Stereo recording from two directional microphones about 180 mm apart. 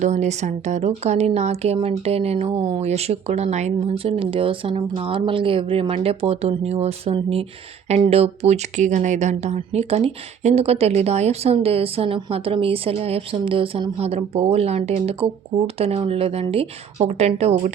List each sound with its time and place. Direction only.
0.0 s speech: 40° right (ahead or behind)